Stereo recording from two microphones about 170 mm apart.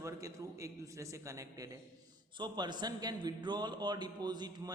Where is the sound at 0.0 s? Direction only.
20° right (ahead or behind).